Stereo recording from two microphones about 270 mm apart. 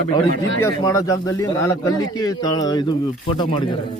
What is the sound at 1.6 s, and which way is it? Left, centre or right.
Speech, left.